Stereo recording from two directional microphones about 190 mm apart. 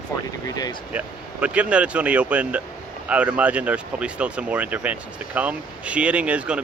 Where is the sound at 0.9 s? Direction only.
5° right (ahead or behind).